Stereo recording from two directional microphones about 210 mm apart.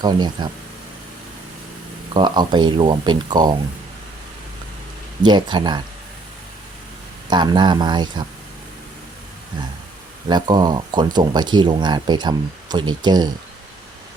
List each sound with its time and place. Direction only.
0.0 s speech: 20° right (ahead or behind)
2.1 s speech: 20° right (ahead or behind)
5.2 s speech: 20° right (ahead or behind)
7.3 s speech: 20° right (ahead or behind)
10.2 s speech: 20° right (ahead or behind)